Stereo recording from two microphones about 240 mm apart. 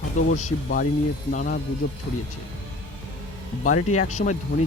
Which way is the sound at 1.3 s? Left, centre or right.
Left.